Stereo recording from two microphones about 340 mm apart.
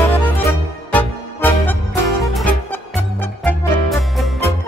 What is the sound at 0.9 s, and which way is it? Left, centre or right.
Music, centre.